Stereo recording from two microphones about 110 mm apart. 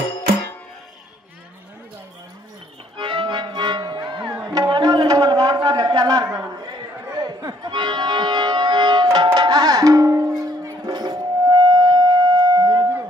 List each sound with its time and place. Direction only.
3.0 s music: 50° right (ahead or behind)
4.4 s a sound: 35° right (ahead or behind)
7.1 s music: 35° right (ahead or behind)